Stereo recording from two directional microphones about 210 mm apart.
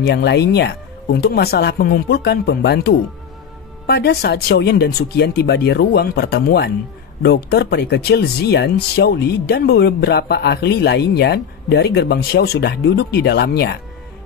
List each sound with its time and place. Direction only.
0.0 s speech: 55° left (ahead or behind)